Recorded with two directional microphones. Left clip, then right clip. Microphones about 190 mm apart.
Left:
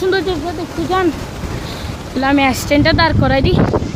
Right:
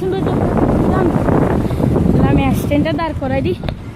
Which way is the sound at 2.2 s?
10° left (ahead or behind).